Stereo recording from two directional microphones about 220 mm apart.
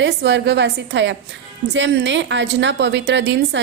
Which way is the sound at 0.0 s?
50° right (ahead or behind).